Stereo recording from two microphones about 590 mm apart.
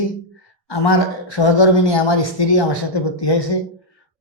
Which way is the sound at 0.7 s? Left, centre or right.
Left.